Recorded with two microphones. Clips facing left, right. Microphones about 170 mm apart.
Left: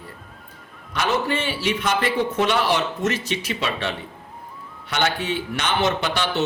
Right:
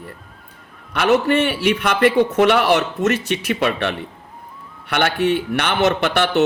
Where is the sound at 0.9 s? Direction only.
65° right (ahead or behind).